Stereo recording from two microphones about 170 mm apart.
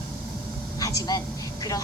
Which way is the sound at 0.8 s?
20° left (ahead or behind).